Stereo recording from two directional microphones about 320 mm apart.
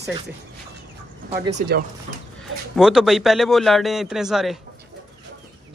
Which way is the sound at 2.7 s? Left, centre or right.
Centre.